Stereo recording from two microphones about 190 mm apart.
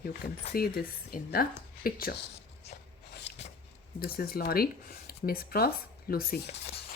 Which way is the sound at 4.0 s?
50° left (ahead or behind).